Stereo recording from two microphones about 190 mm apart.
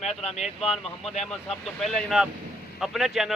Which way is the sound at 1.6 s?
Centre (ahead or behind).